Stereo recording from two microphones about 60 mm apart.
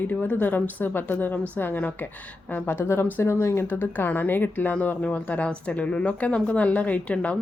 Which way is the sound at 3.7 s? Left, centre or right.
Left.